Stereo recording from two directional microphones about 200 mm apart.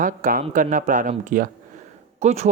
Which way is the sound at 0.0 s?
40° right (ahead or behind).